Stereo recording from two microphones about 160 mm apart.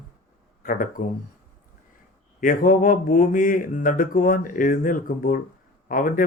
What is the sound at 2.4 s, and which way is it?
Speech, 60° left (ahead or behind).